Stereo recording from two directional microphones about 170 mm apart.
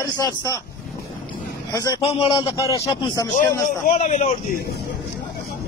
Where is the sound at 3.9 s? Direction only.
40° left (ahead or behind).